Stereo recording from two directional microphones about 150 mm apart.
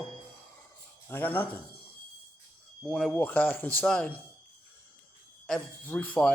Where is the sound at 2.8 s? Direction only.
Centre (ahead or behind).